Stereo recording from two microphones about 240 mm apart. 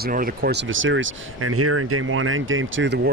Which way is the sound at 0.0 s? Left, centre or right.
Right.